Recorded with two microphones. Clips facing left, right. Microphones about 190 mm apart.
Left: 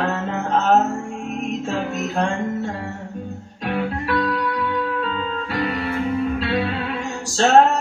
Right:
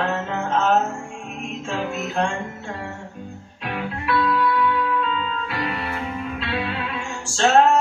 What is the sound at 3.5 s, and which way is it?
Music, 40° left (ahead or behind).